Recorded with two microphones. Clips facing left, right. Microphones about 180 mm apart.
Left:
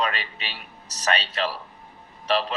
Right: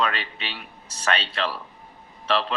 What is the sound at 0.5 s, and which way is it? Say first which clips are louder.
Speech: right 1 dB; 40° left (ahead or behind).